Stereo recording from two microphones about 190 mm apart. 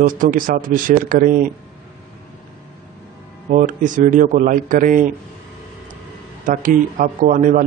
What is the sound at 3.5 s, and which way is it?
Speech, 45° right (ahead or behind).